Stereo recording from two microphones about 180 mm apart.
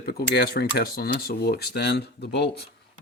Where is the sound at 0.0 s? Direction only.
60° left (ahead or behind).